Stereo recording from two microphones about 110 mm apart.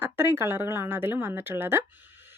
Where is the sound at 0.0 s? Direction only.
25° right (ahead or behind).